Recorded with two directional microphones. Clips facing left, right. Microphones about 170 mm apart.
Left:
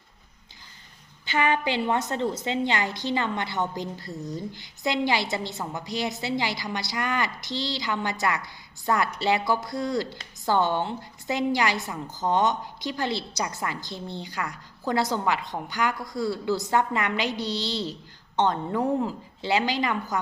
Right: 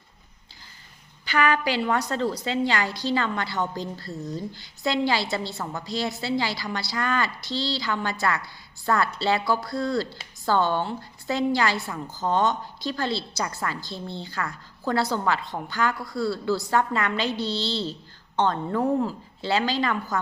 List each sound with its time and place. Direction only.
1.2 s a woman's voice: 20° left (ahead or behind)